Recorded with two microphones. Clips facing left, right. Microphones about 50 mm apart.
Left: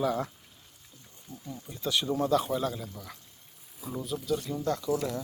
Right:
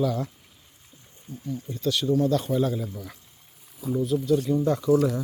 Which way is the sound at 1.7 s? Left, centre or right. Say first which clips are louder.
Right 5 dB; centre.